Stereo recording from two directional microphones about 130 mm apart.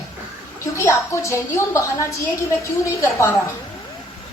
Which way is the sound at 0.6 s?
20° left (ahead or behind).